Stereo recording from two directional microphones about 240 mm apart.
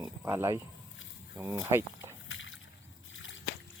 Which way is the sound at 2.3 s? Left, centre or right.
Left.